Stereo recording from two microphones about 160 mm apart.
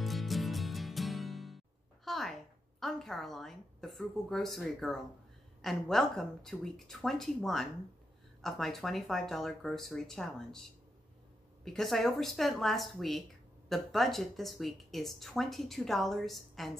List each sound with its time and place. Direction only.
0.0 s music: centre (ahead or behind)
2.0 s a sound: centre (ahead or behind)
2.8 s speech: centre (ahead or behind)